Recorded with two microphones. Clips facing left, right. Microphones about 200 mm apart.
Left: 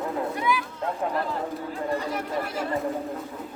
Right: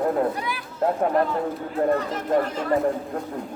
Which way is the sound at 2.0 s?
10° left (ahead or behind).